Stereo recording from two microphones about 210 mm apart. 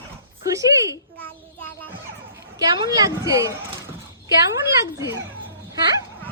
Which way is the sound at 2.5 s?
20° right (ahead or behind).